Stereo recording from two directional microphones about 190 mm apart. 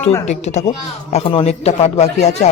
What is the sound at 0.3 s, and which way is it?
Speech, 35° left (ahead or behind).